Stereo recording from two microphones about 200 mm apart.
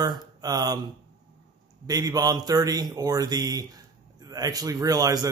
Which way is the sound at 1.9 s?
20° right (ahead or behind).